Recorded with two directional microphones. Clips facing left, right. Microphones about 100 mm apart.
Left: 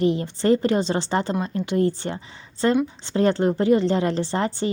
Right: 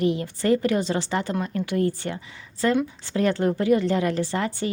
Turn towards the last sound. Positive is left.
turn(degrees=30)  # may be behind; listen again after turning